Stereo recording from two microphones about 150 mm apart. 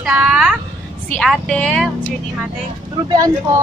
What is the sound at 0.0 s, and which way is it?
A woman's voice, 5° right (ahead or behind).